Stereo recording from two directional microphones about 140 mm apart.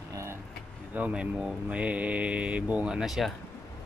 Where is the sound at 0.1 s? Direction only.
20° right (ahead or behind).